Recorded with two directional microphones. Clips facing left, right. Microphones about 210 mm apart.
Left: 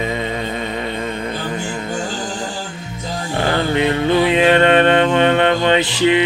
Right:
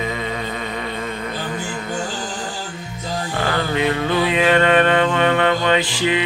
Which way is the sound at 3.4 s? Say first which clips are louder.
Left 3 dB; 30° left (ahead or behind).